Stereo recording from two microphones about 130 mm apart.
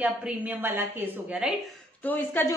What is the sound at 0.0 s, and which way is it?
A woman's voice, 15° right (ahead or behind).